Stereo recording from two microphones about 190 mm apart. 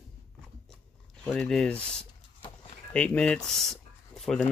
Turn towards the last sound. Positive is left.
turn(degrees=0)  # may be behind; listen again after turning